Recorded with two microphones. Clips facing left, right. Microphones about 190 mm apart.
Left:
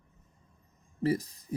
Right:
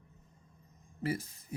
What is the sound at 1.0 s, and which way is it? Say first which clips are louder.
Speech: left 7 dB; 35° left (ahead or behind).